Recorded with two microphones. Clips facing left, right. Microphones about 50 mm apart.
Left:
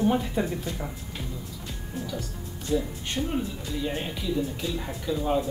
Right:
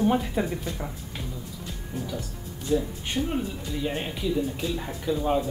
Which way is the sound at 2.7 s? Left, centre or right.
Centre.